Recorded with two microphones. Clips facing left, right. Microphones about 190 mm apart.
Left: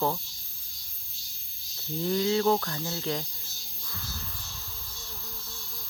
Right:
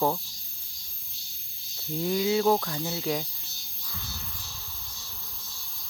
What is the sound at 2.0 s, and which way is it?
Speech, 10° right (ahead or behind).